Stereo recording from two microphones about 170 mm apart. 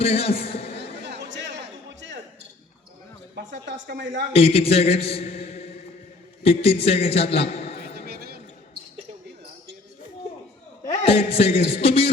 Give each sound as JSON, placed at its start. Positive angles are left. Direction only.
{"t": 0.0, "sound": "a man's voice", "side_deg": 35}
{"t": 0.8, "sound": "a sound", "side_deg": -90}
{"t": 3.3, "sound": "a woman's voice", "side_deg": -85}
{"t": 4.3, "sound": "a man's voice", "side_deg": 35}
{"t": 7.9, "sound": "a sound", "side_deg": -65}
{"t": 11.0, "sound": "a man's voice", "side_deg": 35}